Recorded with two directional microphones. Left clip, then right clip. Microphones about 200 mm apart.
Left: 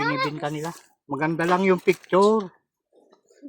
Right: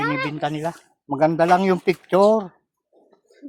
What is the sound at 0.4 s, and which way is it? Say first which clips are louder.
Speech: right 5 dB; 30° right (ahead or behind).